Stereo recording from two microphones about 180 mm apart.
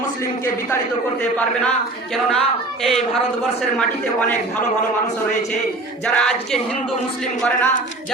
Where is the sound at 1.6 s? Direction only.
5° left (ahead or behind).